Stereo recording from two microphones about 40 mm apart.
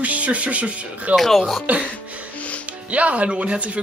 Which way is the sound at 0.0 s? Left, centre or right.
Right.